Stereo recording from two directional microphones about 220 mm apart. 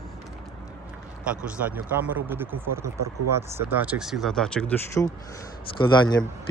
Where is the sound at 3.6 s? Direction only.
10° right (ahead or behind).